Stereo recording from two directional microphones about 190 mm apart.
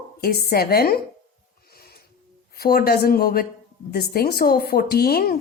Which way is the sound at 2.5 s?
55° left (ahead or behind).